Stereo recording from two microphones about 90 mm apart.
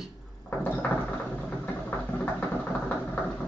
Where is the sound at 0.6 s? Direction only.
15° left (ahead or behind).